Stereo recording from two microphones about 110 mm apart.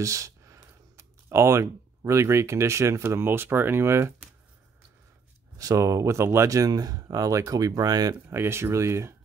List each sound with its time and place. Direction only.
0.0 s a sound: 30° right (ahead or behind)
0.9 s speech: 25° right (ahead or behind)
5.6 s speech: 30° right (ahead or behind)
8.3 s speech: 25° right (ahead or behind)